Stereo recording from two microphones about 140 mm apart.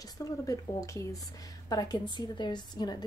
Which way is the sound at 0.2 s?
25° left (ahead or behind).